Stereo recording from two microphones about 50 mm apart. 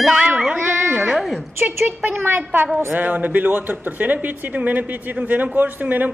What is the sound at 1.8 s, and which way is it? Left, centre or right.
Speech, right.